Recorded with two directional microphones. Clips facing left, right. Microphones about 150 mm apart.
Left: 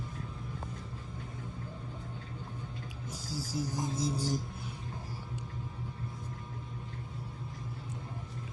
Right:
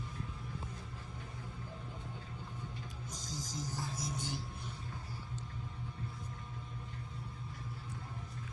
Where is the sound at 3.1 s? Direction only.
5° left (ahead or behind).